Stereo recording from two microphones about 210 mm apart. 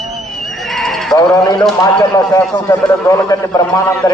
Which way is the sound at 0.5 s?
Centre (ahead or behind).